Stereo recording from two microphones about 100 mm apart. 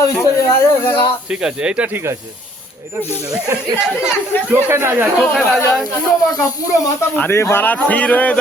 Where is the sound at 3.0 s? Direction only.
25° left (ahead or behind).